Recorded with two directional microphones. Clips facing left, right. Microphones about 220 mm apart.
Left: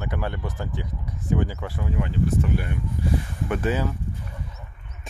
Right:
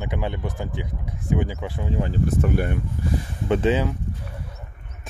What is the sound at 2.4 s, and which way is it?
Speech, 50° right (ahead or behind).